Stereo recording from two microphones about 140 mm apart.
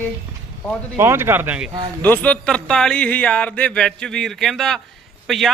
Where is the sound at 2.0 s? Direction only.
10° left (ahead or behind).